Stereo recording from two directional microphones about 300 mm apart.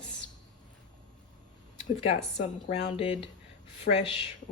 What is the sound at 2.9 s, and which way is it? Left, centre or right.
A woman's voice, centre.